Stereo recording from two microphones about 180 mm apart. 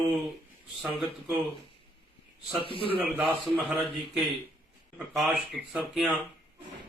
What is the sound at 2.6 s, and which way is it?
Speech, 30° left (ahead or behind).